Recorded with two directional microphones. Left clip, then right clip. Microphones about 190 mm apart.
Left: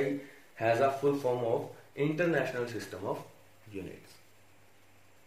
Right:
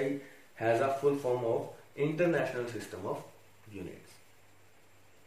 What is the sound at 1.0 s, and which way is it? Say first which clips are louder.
Speech: even; 35° left (ahead or behind).